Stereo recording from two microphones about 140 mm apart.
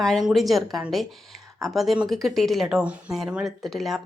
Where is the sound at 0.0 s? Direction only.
Centre (ahead or behind).